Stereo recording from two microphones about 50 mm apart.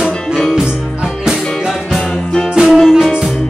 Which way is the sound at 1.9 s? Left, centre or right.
Centre.